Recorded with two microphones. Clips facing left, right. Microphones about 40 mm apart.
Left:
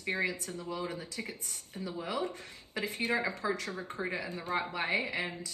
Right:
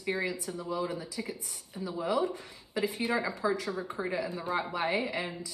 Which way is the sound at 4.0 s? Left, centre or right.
Centre.